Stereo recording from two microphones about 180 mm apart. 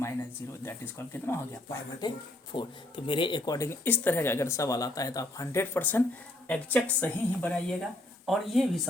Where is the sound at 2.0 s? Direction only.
25° left (ahead or behind).